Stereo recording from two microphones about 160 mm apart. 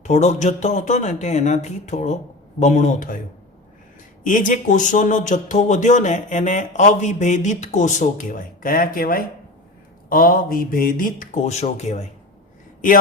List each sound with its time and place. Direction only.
0.0 s speech: 45° left (ahead or behind)
4.2 s speech: 55° left (ahead or behind)